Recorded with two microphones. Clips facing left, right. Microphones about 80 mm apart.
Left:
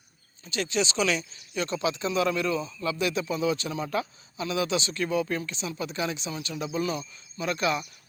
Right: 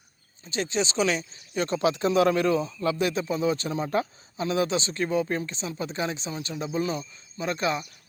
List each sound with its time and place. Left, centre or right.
0.4 s speech: right